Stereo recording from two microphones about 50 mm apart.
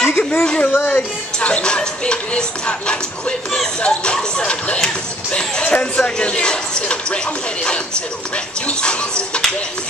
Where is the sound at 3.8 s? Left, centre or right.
Left.